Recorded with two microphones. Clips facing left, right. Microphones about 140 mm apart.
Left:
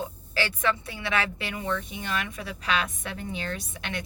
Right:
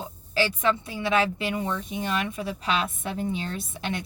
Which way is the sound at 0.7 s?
25° right (ahead or behind).